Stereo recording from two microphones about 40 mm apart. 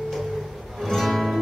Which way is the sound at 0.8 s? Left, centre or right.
Centre.